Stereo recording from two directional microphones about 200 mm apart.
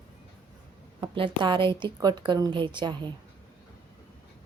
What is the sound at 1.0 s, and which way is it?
A woman's voice, 25° right (ahead or behind).